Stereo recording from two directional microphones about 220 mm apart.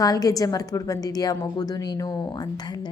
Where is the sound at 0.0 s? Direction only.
15° left (ahead or behind).